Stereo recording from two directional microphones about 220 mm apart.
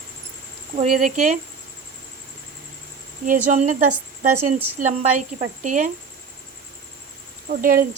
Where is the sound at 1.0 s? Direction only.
35° right (ahead or behind).